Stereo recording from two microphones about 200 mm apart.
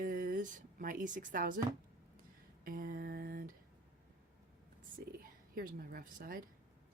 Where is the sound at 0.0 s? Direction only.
45° right (ahead or behind).